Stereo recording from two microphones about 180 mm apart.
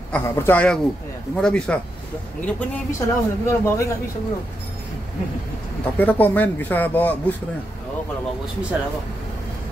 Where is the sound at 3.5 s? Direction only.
15° left (ahead or behind).